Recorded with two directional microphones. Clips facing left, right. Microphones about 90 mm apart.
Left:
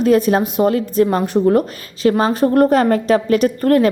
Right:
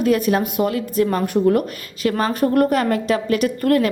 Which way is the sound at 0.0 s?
30° left (ahead or behind).